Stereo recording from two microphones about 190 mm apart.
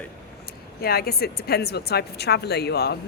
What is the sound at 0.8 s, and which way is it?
A woman's voice, 55° left (ahead or behind).